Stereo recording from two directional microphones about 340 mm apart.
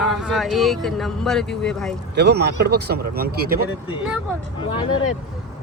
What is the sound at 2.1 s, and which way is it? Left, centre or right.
Speech, right.